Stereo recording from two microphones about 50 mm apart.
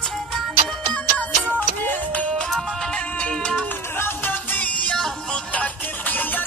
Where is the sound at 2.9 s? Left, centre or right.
Left.